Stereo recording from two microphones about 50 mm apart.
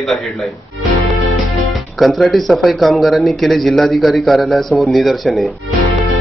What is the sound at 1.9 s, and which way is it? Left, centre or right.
Speech, centre.